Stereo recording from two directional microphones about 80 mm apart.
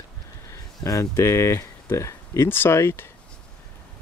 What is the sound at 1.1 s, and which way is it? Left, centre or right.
Speech, left.